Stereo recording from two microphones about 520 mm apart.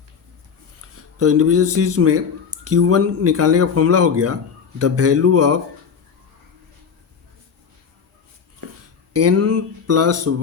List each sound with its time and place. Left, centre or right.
1.2 s speech: right
9.1 s speech: right